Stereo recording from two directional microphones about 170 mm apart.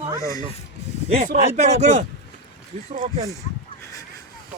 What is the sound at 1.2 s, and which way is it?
Speech, 40° right (ahead or behind).